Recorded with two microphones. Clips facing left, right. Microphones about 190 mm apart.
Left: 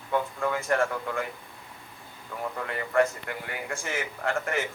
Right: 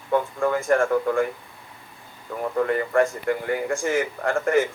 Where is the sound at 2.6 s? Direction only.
45° right (ahead or behind).